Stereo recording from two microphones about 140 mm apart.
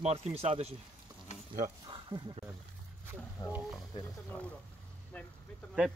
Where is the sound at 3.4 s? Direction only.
25° left (ahead or behind).